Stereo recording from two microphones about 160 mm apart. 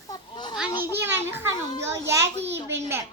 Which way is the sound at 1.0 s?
15° right (ahead or behind).